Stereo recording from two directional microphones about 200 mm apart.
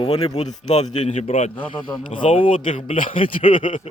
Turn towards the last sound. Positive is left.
turn(degrees=25)  # may be behind; listen again after turning